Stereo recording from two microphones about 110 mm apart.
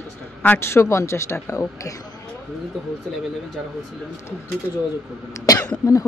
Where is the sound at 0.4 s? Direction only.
20° left (ahead or behind).